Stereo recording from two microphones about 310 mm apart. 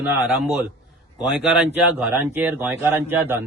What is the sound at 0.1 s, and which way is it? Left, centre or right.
Speech, centre.